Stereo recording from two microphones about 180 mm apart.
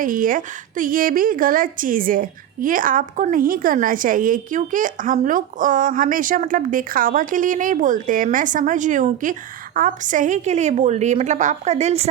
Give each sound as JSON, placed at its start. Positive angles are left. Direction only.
{"t": 0.0, "sound": "a woman's voice", "side_deg": -50}